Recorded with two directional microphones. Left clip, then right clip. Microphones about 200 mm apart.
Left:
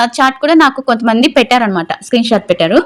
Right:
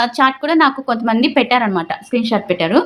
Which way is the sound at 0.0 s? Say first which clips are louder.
Left 4 dB; 30° left (ahead or behind).